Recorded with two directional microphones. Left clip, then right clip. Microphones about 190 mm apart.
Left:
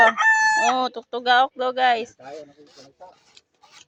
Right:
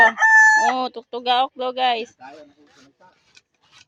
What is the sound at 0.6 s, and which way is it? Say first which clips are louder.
Speech: even; 10° right (ahead or behind).